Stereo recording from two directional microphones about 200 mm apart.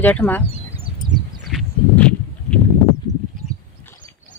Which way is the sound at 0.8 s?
25° right (ahead or behind).